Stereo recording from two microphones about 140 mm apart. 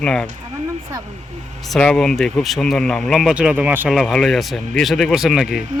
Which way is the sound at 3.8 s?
Centre (ahead or behind).